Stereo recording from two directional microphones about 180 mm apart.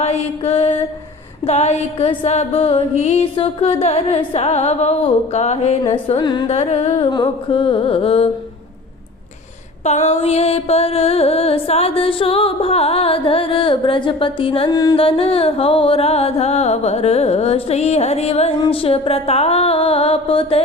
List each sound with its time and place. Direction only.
0.0 s mantra: 35° left (ahead or behind)
1.5 s music: 35° left (ahead or behind)
5.8 s music: 30° left (ahead or behind)
6.6 s music: 35° left (ahead or behind)
9.8 s music: 40° left (ahead or behind)
14.7 s music: 20° left (ahead or behind)
14.9 s music: 30° left (ahead or behind)